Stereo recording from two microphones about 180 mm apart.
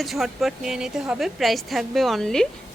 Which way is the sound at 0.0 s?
Centre (ahead or behind).